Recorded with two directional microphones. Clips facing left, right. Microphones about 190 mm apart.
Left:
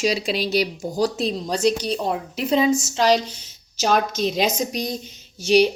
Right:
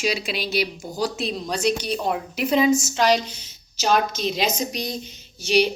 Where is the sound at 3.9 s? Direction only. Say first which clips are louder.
Left 1 dB; 45° left (ahead or behind).